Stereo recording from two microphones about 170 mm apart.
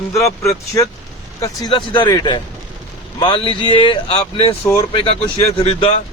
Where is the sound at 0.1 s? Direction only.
15° left (ahead or behind).